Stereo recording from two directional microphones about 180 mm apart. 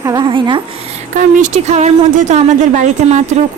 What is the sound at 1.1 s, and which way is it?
A woman's voice, 40° right (ahead or behind).